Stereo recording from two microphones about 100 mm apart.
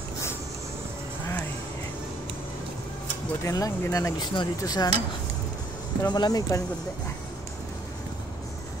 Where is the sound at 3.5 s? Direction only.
35° left (ahead or behind).